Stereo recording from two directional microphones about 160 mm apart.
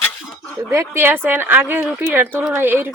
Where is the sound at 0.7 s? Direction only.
15° right (ahead or behind).